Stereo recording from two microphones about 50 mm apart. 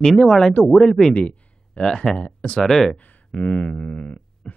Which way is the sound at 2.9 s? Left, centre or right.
Left.